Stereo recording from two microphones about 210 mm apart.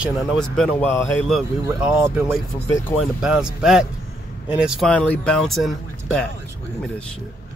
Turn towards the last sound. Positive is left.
turn(degrees=0)  # may be behind; listen again after turning